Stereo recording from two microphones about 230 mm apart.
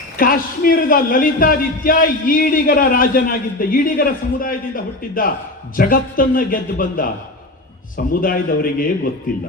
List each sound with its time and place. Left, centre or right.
0.2 s speech: left